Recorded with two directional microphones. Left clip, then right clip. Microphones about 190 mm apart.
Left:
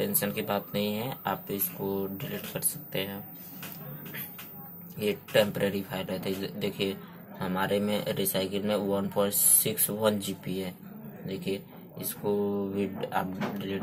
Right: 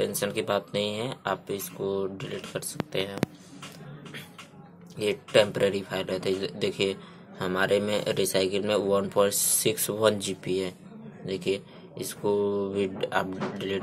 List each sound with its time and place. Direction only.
0.0 s speech: 25° right (ahead or behind)
4.9 s speech: 25° right (ahead or behind)